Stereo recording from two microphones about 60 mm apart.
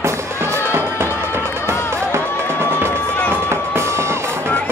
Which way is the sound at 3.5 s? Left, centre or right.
Right.